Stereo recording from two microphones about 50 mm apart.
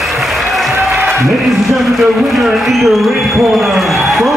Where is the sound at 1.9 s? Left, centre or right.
Centre.